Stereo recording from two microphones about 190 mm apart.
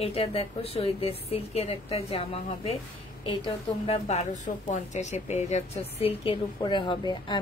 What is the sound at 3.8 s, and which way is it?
A woman's voice, 35° left (ahead or behind).